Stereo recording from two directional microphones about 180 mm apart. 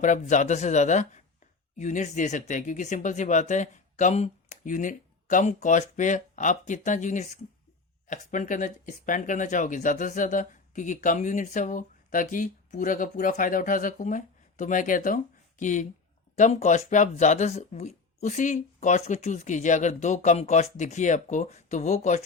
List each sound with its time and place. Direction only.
0.0 s speech: 40° left (ahead or behind)